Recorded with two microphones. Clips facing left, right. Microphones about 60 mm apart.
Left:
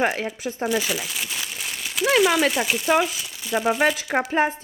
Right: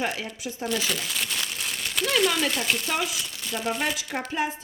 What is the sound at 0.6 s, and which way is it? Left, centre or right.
Speech, centre.